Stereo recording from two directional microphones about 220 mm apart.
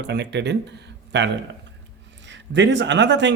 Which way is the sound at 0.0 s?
50° right (ahead or behind).